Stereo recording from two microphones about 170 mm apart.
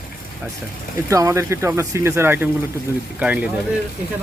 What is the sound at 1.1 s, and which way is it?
Speech, 20° right (ahead or behind).